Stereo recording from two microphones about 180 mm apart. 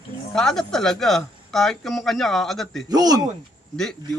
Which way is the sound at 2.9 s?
20° right (ahead or behind).